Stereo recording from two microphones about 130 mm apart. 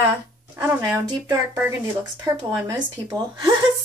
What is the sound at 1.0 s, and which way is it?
Speech, 30° right (ahead or behind).